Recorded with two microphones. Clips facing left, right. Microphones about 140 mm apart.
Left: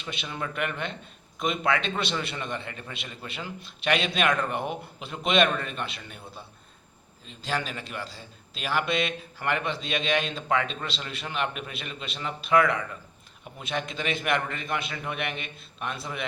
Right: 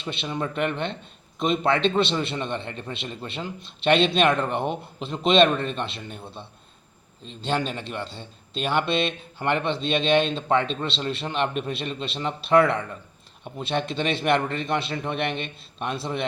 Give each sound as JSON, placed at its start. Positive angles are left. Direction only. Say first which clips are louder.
{"t": 0.0, "sound": "a man's voice", "louder": "right 5 dB", "side_deg": -30}